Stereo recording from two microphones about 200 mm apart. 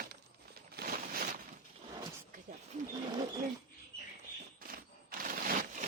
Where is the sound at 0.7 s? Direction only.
50° right (ahead or behind).